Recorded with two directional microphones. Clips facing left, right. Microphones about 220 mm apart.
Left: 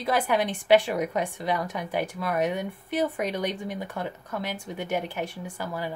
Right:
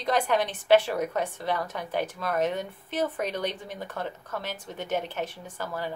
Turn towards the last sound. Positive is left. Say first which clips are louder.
# left 1 dB
turn(degrees=10)  # may be behind; listen again after turning